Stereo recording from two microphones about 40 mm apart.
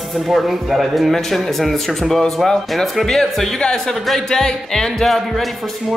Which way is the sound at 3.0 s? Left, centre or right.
Centre.